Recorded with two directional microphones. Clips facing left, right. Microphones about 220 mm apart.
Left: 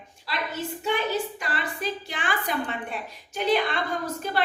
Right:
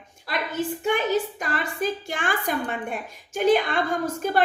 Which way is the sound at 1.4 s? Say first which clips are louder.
Right 4 dB; 45° right (ahead or behind).